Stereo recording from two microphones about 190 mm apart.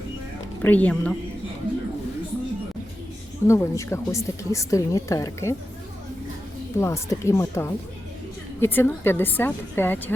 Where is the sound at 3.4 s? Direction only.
15° left (ahead or behind).